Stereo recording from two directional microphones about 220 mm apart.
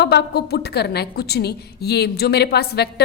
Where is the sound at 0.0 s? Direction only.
50° left (ahead or behind).